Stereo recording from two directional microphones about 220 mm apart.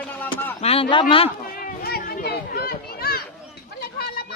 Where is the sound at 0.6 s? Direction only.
25° left (ahead or behind).